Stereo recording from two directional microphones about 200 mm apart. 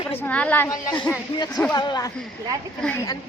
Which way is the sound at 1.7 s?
20° left (ahead or behind).